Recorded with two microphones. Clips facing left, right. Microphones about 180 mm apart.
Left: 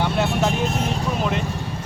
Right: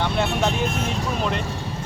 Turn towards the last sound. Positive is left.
turn(degrees=0)  # may be behind; listen again after turning